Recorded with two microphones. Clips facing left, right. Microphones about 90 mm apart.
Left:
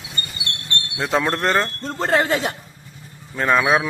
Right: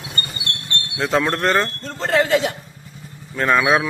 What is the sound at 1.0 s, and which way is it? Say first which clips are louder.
Speech: right 1 dB; 10° left (ahead or behind).